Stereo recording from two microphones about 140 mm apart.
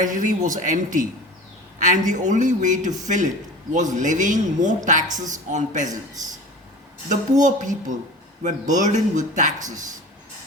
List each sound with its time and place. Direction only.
0.0 s speech: 65° right (ahead or behind)
7.1 s speech: 65° right (ahead or behind)